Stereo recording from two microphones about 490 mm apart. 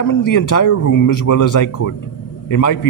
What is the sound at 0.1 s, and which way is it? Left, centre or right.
A man's voice, left.